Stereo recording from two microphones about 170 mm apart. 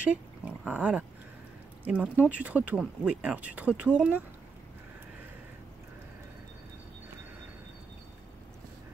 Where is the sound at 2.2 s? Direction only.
10° right (ahead or behind).